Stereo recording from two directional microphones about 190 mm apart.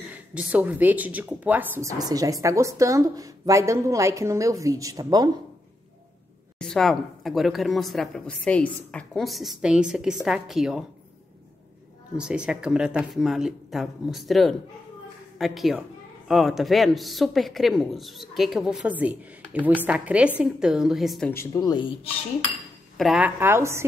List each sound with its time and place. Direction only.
0.1 s speech: 5° right (ahead or behind)
6.6 s speech: 5° left (ahead or behind)
12.2 s speech: 5° right (ahead or behind)
21.3 s speech: 15° left (ahead or behind)
22.9 s speech: centre (ahead or behind)